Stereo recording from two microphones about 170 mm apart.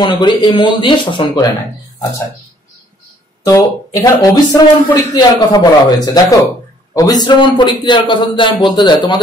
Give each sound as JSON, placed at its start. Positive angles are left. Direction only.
{"t": 0.0, "sound": "speech", "side_deg": 25}
{"t": 3.4, "sound": "speech", "side_deg": 20}